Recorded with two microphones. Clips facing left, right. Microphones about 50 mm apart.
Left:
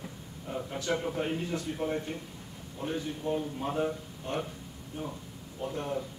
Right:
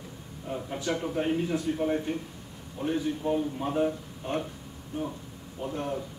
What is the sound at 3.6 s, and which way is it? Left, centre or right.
Speech, centre.